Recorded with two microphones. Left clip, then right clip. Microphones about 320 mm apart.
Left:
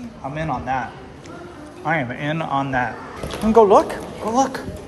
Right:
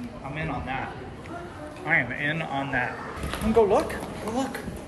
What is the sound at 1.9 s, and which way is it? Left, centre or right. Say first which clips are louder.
Speech: left 2 dB; left.